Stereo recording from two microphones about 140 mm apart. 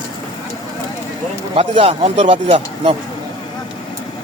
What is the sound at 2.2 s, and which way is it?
Speech, 40° right (ahead or behind).